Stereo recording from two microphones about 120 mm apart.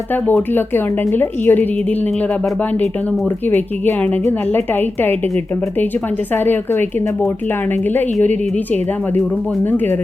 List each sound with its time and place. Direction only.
0.5 s a woman's voice: 15° left (ahead or behind)
3.5 s a woman's voice: 15° left (ahead or behind)
6.3 s a woman's voice: 15° left (ahead or behind)